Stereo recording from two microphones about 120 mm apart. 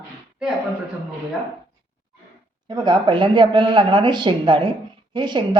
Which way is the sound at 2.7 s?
40° right (ahead or behind).